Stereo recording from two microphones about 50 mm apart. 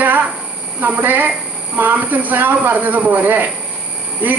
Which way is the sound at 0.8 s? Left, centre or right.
Right.